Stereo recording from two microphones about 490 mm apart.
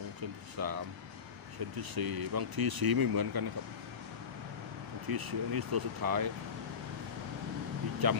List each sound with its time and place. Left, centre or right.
0.2 s speech: right
1.8 s speech: right
5.0 s speech: right
8.0 s speech: right